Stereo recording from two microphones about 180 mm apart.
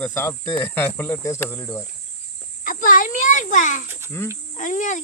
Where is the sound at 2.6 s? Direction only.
50° left (ahead or behind).